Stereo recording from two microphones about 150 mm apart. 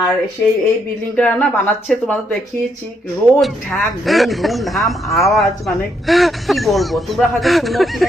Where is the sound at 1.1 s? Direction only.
10° left (ahead or behind).